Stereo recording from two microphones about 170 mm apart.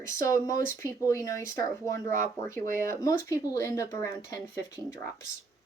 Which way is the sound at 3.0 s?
20° left (ahead or behind).